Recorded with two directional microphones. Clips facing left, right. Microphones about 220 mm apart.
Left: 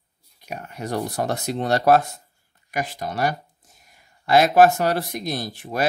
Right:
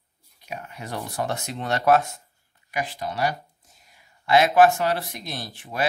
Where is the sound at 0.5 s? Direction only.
45° left (ahead or behind).